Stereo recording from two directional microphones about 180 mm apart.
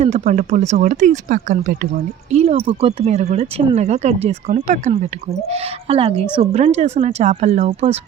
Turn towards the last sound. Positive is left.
turn(degrees=-35)  # may be behind; listen again after turning